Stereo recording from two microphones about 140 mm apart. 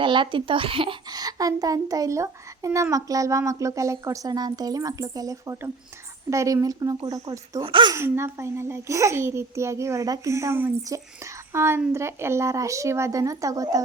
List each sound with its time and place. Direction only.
0.0 s a child's voice: 35° right (ahead or behind)
7.9 s a child's voice: 20° right (ahead or behind)